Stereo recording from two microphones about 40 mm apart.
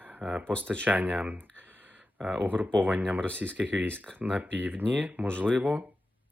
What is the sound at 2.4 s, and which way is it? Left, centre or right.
Speech, right.